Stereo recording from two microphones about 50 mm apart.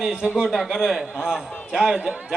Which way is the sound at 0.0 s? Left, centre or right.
Centre.